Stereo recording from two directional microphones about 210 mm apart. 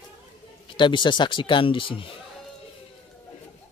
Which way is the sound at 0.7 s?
20° left (ahead or behind).